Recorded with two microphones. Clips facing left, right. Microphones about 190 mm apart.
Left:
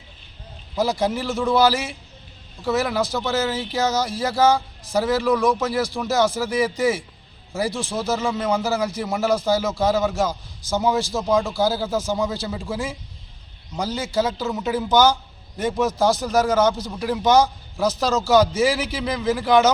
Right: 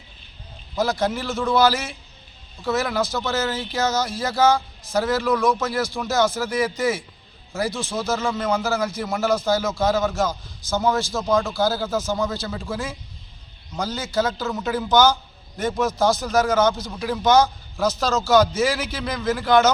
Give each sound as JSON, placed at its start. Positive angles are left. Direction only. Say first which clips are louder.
{"t": 0.8, "sound": "a man's voice", "louder": "left 1 dB", "side_deg": 10}
{"t": 1.7, "sound": "a man's voice", "louder": "left 2 dB", "side_deg": 35}
{"t": 2.6, "sound": "a man's voice", "louder": "left 1 dB", "side_deg": 10}